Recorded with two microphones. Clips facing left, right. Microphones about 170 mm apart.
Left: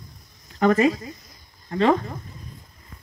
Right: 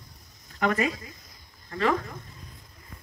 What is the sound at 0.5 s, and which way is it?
Speech, 35° left (ahead or behind).